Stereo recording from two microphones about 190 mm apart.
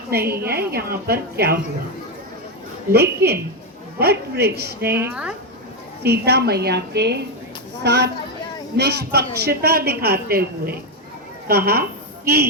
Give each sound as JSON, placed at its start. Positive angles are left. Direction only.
{"t": 0.1, "sound": "a woman's voice", "side_deg": -55}
{"t": 2.9, "sound": "a woman's voice", "side_deg": -55}
{"t": 4.9, "sound": "speech", "side_deg": -10}
{"t": 6.0, "sound": "a woman's voice", "side_deg": -60}